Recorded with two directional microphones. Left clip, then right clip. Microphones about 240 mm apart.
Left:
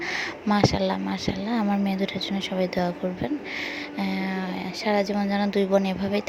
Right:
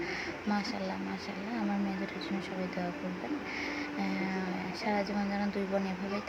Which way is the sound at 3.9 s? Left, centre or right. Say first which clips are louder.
Left 8 dB; left.